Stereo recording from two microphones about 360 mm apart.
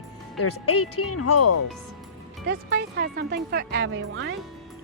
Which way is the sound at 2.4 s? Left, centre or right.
Right.